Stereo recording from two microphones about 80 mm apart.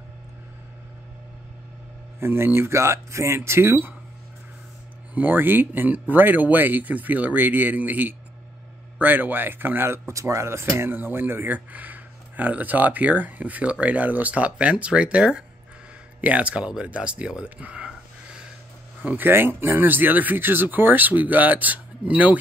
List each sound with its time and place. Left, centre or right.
2.1 s speech: right
5.1 s speech: right
19.0 s speech: right